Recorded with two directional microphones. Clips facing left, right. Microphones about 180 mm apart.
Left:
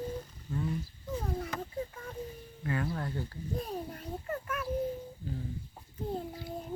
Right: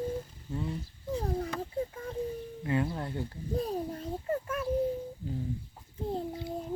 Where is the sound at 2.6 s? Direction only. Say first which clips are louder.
Right 3 dB; 20° right (ahead or behind).